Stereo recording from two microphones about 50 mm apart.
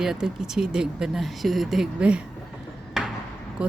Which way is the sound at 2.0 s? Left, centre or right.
Right.